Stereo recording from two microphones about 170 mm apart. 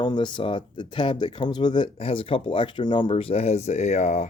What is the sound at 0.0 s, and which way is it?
Speech, 25° left (ahead or behind).